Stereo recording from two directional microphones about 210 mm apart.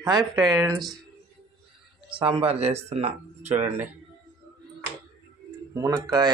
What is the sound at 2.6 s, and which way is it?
Speech, 30° right (ahead or behind).